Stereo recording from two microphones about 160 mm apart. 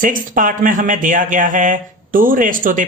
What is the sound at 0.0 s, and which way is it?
Speech, 55° right (ahead or behind).